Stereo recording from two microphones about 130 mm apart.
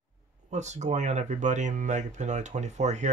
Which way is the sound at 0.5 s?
60° right (ahead or behind).